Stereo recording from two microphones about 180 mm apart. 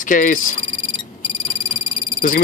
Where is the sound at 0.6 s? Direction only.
30° left (ahead or behind).